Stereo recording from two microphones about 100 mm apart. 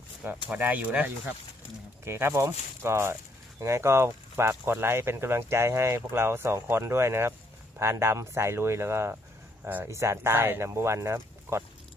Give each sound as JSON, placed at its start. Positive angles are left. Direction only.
{"t": 0.4, "sound": "speech", "side_deg": -15}
{"t": 2.0, "sound": "speech", "side_deg": -25}
{"t": 9.9, "sound": "speech", "side_deg": -30}